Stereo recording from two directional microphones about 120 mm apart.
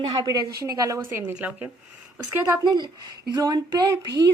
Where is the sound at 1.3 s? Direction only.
10° right (ahead or behind).